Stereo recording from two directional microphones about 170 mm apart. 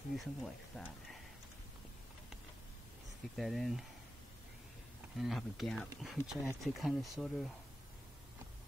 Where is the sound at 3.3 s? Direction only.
Centre (ahead or behind).